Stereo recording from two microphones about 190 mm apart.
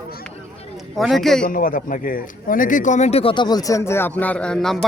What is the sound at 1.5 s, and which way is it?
A man's voice, 45° left (ahead or behind).